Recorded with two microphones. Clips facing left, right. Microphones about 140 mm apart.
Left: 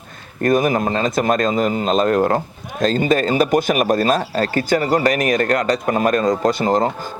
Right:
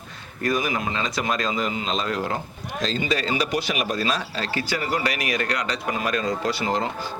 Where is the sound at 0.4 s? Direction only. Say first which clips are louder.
Left 8 dB; 50° left (ahead or behind).